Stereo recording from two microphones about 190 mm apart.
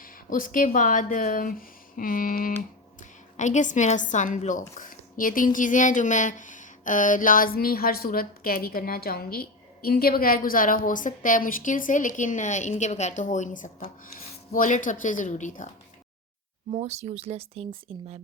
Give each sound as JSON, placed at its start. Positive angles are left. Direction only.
{"t": 0.0, "sound": "a woman's voice", "side_deg": 45}
{"t": 16.7, "sound": "speech", "side_deg": -35}